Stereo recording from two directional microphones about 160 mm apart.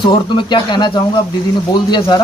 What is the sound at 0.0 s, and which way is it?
Speech, 30° left (ahead or behind).